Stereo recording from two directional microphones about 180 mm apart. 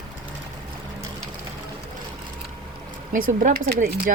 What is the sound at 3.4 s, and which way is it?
Speech, 50° right (ahead or behind).